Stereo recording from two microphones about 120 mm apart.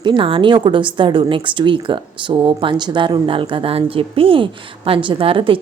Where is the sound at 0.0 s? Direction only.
45° right (ahead or behind).